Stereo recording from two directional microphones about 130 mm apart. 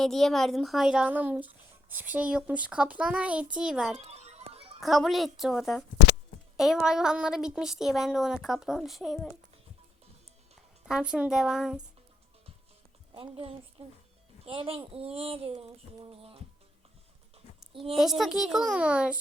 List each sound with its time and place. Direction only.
0.0 s speech: centre (ahead or behind)
3.9 s a sound: 55° right (ahead or behind)
4.8 s a woman's voice: centre (ahead or behind)
10.8 s a woman's voice: 5° right (ahead or behind)
13.1 s speech: 45° right (ahead or behind)
17.9 s a woman's voice: centre (ahead or behind)